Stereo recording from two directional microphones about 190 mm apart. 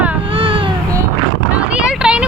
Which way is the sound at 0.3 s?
25° right (ahead or behind).